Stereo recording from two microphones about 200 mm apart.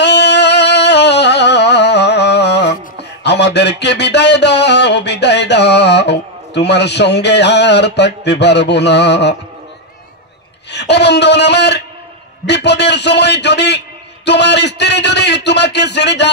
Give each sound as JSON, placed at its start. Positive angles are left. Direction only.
{"t": 0.0, "sound": "music", "side_deg": 60}
{"t": 10.7, "sound": "a man's voice", "side_deg": 60}